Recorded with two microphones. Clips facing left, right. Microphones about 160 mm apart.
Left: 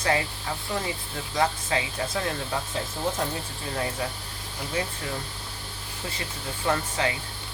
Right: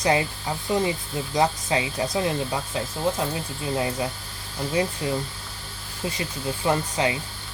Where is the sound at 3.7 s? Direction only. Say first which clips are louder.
Right 4 dB; 20° right (ahead or behind).